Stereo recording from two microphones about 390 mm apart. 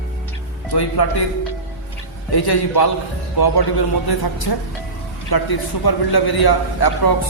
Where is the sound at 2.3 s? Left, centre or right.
Left.